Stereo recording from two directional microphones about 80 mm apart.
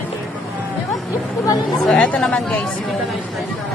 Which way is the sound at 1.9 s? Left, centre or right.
Centre.